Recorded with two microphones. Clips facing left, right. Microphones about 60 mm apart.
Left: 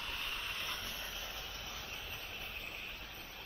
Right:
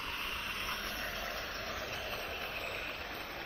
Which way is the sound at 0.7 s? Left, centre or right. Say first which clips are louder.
Right 5 dB; right.